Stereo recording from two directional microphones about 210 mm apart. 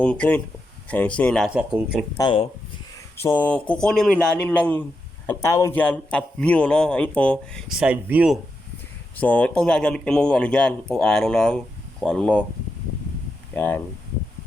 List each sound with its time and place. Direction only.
0.0 s speech: 5° left (ahead or behind)
2.1 s speech: 25° left (ahead or behind)
3.2 s speech: 10° left (ahead or behind); by 8.4 s 5° right (ahead or behind)
9.1 s speech: 5° left (ahead or behind)
13.5 s speech: 10° left (ahead or behind)